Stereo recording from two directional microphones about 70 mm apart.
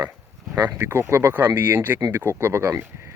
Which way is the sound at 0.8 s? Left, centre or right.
Right.